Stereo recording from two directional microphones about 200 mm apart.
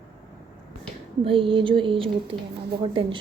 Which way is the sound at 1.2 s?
25° right (ahead or behind).